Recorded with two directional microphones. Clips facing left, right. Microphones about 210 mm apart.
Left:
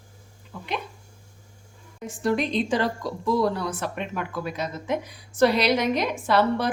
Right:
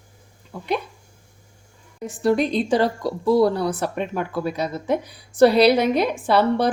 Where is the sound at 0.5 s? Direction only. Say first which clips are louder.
Right 4 dB; 35° right (ahead or behind).